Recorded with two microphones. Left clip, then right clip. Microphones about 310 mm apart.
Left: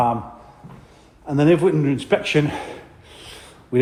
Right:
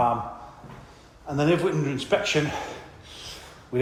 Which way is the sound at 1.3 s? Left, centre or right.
Left.